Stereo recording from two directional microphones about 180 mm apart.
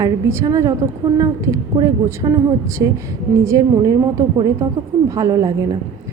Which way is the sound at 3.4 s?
15° right (ahead or behind).